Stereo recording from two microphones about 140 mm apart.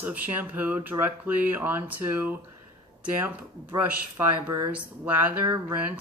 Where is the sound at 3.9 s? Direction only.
15° right (ahead or behind).